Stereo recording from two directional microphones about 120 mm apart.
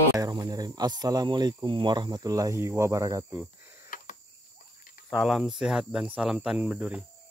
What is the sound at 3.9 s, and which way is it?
Cricket, 90° left.